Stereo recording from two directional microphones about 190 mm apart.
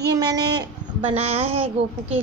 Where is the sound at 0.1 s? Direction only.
20° right (ahead or behind).